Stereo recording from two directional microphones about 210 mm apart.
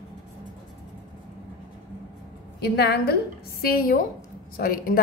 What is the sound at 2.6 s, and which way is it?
A woman's voice, 50° left (ahead or behind).